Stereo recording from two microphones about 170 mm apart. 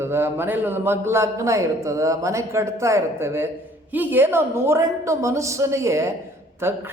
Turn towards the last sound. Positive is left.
turn(degrees=-15)  # may be behind; listen again after turning